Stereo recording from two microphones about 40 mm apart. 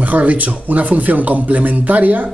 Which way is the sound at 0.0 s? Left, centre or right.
Right.